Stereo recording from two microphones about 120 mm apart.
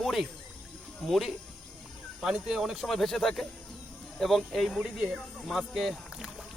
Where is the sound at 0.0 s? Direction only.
Centre (ahead or behind).